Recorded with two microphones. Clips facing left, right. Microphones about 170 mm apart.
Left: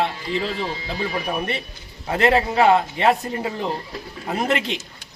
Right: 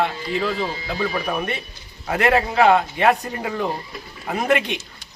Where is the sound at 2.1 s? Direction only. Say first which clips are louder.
Even; 25° left (ahead or behind).